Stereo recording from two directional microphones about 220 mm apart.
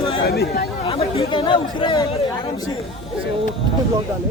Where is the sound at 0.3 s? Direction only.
45° left (ahead or behind).